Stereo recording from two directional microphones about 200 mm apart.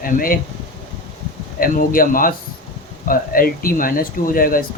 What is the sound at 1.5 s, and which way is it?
A man's voice, 45° left (ahead or behind).